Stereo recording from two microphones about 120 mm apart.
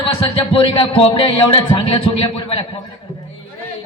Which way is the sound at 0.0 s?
45° left (ahead or behind).